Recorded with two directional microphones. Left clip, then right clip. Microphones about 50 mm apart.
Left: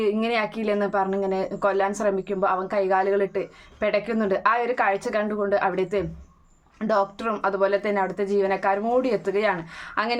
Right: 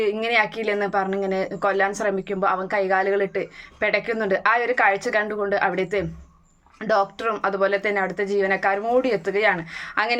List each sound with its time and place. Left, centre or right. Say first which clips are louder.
0.0 s speech: right 3 dB; left